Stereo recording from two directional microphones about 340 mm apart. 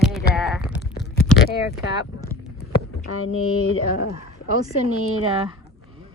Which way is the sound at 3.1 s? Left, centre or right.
Left.